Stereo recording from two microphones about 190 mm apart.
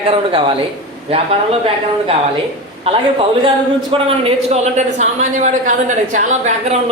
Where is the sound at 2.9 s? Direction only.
30° right (ahead or behind).